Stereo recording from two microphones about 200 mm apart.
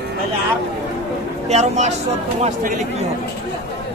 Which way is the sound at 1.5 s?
35° right (ahead or behind).